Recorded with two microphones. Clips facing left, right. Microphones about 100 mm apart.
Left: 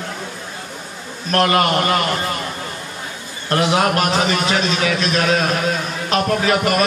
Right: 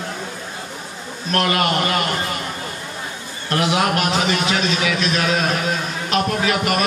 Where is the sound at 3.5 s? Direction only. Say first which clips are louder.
Left 2 dB; 40° left (ahead or behind).